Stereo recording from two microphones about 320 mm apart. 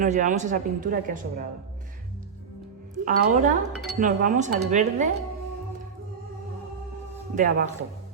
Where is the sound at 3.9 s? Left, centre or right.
Right.